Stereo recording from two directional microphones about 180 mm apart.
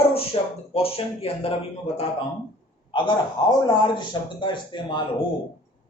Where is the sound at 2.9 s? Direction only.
25° left (ahead or behind).